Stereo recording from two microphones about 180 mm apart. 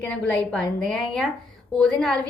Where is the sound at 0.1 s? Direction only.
5° left (ahead or behind).